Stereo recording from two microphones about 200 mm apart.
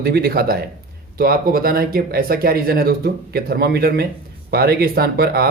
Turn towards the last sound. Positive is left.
turn(degrees=-50)  # may be behind; listen again after turning